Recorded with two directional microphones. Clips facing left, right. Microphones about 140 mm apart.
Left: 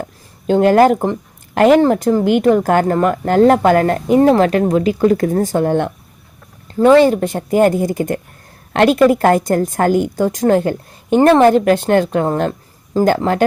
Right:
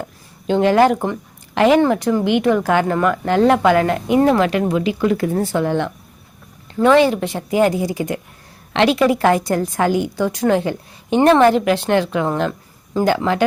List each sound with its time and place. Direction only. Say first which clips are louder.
0.0 s a sound: left 4 dB; 45° left (ahead or behind)
1.8 s a woman's voice: left 3 dB; 40° left (ahead or behind)
6.7 s a woman's voice: left 4 dB; 35° left (ahead or behind)